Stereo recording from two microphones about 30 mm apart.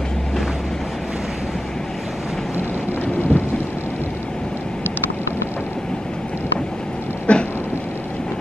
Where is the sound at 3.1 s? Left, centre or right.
Left.